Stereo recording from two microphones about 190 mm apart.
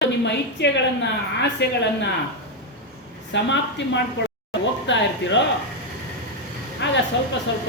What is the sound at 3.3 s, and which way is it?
Speech, 70° left (ahead or behind).